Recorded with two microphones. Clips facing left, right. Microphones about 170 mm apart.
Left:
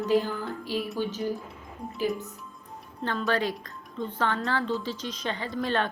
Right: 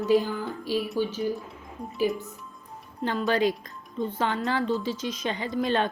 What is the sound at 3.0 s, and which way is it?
A woman's voice, 10° right (ahead or behind).